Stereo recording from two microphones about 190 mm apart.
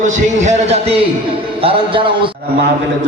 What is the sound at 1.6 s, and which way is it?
Music, 30° right (ahead or behind).